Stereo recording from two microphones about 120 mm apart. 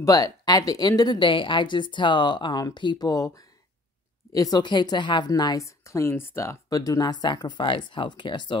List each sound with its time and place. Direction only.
0.0 s speech: 30° left (ahead or behind)